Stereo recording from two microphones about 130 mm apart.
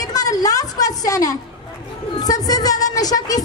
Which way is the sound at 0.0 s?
30° left (ahead or behind).